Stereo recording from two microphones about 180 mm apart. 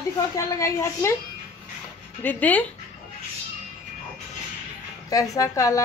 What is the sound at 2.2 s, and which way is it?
Speech, 10° left (ahead or behind).